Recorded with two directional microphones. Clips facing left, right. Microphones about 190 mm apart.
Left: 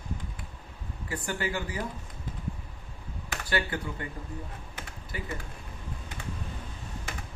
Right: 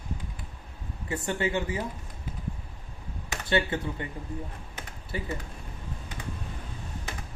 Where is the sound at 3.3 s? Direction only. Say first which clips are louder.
Right 4 dB; 25° right (ahead or behind).